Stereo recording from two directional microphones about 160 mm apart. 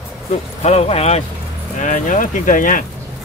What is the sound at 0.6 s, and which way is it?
Speech, 40° left (ahead or behind).